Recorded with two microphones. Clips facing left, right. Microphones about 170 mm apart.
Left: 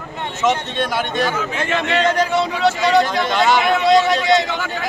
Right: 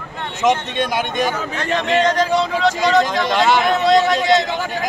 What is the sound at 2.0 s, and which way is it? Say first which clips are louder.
Speech: even; 5° left (ahead or behind).